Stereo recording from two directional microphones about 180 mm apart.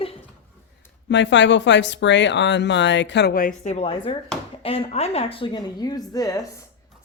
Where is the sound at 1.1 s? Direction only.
80° left.